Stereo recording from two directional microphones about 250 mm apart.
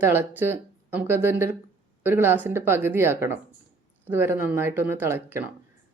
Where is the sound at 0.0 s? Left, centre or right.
Centre.